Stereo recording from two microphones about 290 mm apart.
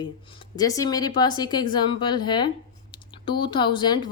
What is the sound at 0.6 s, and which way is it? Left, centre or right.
Speech, centre.